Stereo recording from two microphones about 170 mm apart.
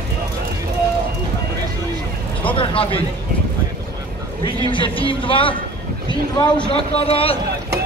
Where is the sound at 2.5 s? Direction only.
30° left (ahead or behind).